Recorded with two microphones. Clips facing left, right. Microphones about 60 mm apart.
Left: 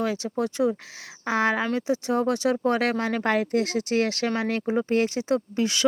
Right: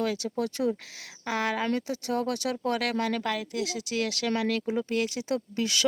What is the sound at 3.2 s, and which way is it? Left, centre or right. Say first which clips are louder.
Speech: left 7 dB; left.